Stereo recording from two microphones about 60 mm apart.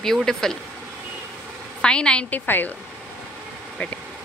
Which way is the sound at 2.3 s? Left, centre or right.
Left.